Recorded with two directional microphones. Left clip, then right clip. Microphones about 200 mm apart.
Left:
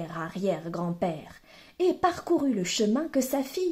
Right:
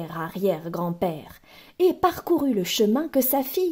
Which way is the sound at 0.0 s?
40° right (ahead or behind).